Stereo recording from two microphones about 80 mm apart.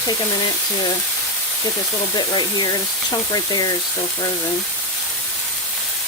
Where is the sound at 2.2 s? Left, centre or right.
Left.